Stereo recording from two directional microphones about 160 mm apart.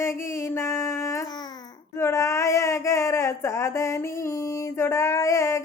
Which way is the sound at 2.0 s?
15° left (ahead or behind).